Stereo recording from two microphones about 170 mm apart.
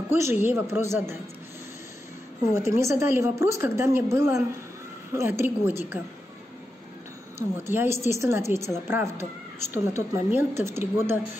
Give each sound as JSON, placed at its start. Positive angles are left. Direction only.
{"t": 0.1, "sound": "a woman's voice", "side_deg": -15}
{"t": 2.5, "sound": "a woman's voice", "side_deg": -15}
{"t": 7.3, "sound": "a woman's voice", "side_deg": -15}